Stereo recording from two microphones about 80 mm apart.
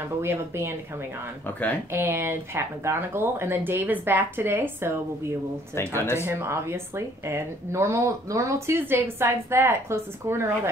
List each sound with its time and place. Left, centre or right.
0.2 s a woman's voice: right
1.9 s speech: right
5.9 s speech: left
6.2 s a woman's voice: right